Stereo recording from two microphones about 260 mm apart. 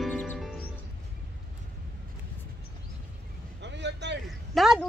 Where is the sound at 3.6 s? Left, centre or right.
Right.